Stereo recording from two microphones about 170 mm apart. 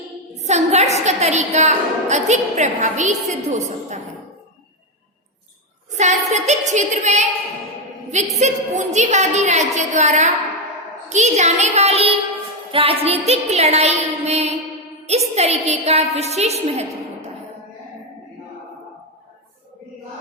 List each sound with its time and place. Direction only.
0.3 s a woman's voice: 40° right (ahead or behind)
5.9 s a woman's voice: 45° right (ahead or behind)